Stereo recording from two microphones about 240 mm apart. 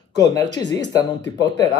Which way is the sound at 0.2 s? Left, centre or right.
Centre.